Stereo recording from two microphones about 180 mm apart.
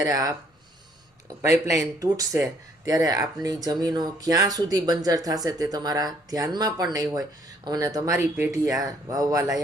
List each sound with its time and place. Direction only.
0.0 s speech: 20° right (ahead or behind)
1.4 s speech: 15° right (ahead or behind)